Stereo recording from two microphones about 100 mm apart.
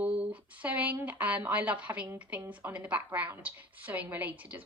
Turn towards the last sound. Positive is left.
turn(degrees=-15)  # may be behind; listen again after turning